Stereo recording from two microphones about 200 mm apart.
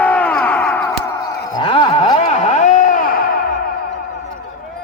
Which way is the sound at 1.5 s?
25° left (ahead or behind).